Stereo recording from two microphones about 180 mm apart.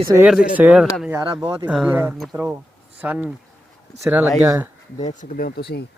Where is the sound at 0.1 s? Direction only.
10° right (ahead or behind).